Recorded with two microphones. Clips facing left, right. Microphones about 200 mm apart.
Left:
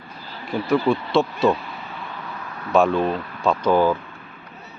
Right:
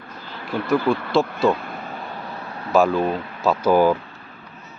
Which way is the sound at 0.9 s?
Centre (ahead or behind).